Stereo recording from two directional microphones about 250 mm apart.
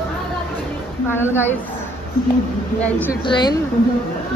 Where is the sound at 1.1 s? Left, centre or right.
Centre.